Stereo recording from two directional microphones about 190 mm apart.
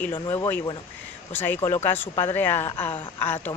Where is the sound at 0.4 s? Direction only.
10° left (ahead or behind).